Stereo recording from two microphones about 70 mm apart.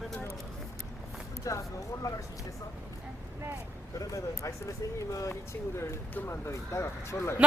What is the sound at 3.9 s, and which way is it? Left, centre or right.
Speech, left.